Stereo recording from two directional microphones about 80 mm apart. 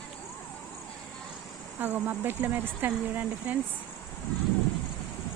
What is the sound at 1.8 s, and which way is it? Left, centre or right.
Speech, right.